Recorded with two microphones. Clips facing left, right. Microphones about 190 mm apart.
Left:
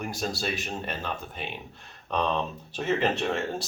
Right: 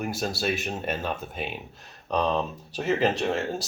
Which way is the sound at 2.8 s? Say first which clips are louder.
Right 2 dB; centre (ahead or behind).